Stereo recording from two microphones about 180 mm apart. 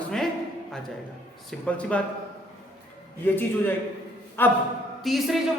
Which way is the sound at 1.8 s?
5° left (ahead or behind).